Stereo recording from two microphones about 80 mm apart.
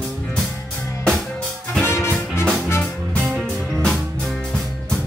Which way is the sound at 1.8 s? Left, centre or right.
Left.